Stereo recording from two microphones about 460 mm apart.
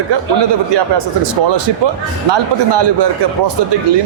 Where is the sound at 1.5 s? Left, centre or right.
Right.